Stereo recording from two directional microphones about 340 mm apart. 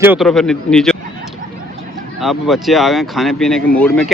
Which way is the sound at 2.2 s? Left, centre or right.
Centre.